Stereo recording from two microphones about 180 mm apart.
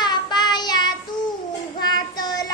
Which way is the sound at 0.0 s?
25° left (ahead or behind).